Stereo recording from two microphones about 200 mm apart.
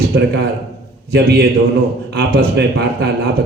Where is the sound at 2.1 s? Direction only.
55° right (ahead or behind).